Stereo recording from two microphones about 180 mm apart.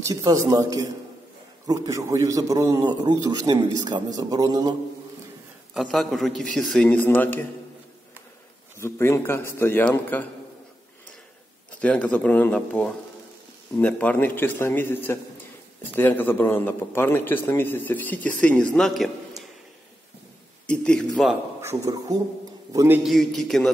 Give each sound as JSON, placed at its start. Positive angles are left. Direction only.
{"t": 0.0, "sound": "a man's voice", "side_deg": -20}
{"t": 5.8, "sound": "a man's voice", "side_deg": 0}
{"t": 8.7, "sound": "a man's voice", "side_deg": 15}
{"t": 11.8, "sound": "a man's voice", "side_deg": 5}
{"t": 20.6, "sound": "a man's voice", "side_deg": 5}
{"t": 21.5, "sound": "a man's voice", "side_deg": -15}
{"t": 23.0, "sound": "a man's voice", "side_deg": 0}